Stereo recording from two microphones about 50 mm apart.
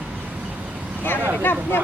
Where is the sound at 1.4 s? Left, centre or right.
Left.